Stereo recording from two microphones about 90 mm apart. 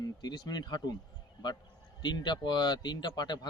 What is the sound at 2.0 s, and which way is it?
Speech, 55° left (ahead or behind).